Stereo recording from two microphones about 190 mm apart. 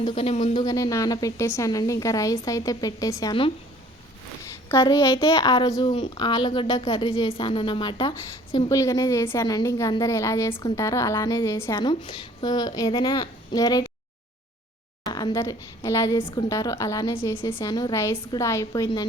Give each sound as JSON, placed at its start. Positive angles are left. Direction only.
{"t": 0.0, "sound": "a woman's voice", "side_deg": 30}
{"t": 4.7, "sound": "a woman's voice", "side_deg": 20}
{"t": 15.1, "sound": "a woman's voice", "side_deg": 20}